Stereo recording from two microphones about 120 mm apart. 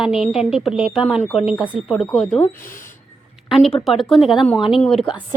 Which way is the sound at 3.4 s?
Centre (ahead or behind).